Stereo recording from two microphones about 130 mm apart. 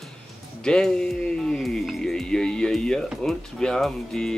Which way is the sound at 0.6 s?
5° left (ahead or behind).